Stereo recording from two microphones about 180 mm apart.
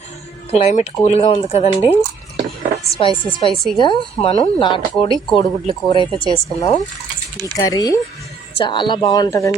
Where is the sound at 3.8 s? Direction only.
30° left (ahead or behind).